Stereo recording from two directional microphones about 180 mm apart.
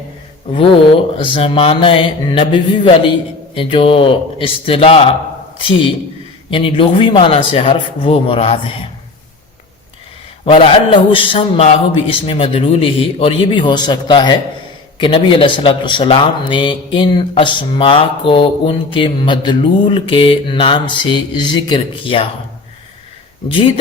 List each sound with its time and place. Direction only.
0.5 s speech: 30° left (ahead or behind)
6.5 s speech: 30° left (ahead or behind)
10.4 s speech: 30° left (ahead or behind)